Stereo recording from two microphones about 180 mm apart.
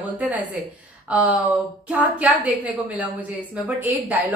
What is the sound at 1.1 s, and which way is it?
A woman's voice, 10° right (ahead or behind).